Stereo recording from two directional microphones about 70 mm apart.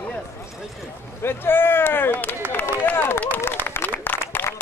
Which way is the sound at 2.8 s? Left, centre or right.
Left.